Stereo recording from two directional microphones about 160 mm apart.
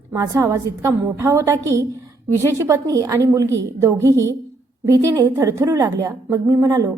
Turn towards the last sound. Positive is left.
turn(degrees=-20)  # may be behind; listen again after turning